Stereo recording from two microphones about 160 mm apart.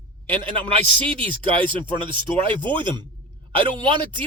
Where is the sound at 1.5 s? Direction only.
30° right (ahead or behind).